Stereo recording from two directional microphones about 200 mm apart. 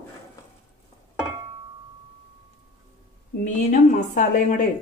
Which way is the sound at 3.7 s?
40° left (ahead or behind).